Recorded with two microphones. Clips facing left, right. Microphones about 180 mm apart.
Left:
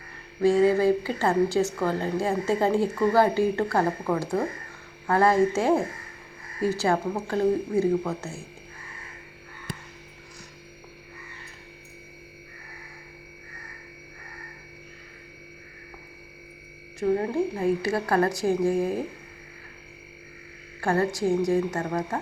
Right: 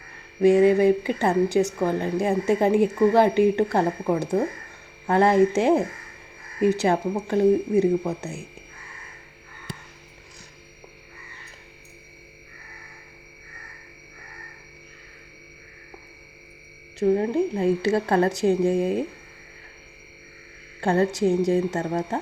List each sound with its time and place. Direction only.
0.4 s speech: 20° right (ahead or behind)
17.0 s speech: 20° right (ahead or behind)
20.8 s speech: 25° right (ahead or behind)